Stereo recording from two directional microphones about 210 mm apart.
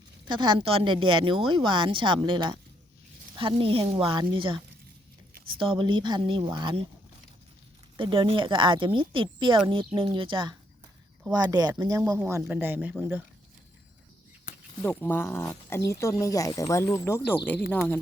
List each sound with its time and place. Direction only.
0.3 s a woman's voice: 20° right (ahead or behind)
7.9 s a woman's voice: 25° right (ahead or behind); by 13.2 s 10° right (ahead or behind)
14.8 s speech: 10° left (ahead or behind)